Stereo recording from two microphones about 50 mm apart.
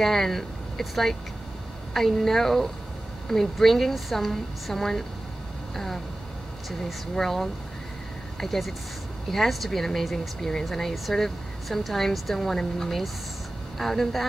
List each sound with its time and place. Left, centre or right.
0.0 s a woman's voice: centre
6.9 s a woman's voice: centre